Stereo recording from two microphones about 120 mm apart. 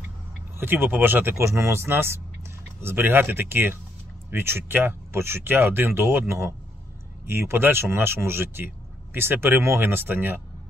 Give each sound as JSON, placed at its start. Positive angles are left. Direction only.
{"t": 0.6, "sound": "speech", "side_deg": -15}